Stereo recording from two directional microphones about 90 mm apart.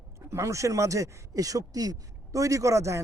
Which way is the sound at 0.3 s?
35° right (ahead or behind).